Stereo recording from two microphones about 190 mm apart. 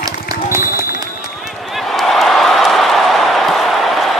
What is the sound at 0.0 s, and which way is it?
Run, 15° right (ahead or behind).